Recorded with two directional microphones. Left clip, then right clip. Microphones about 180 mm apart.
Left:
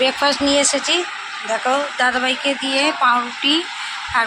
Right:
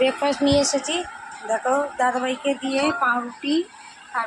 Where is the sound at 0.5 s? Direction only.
15° left (ahead or behind).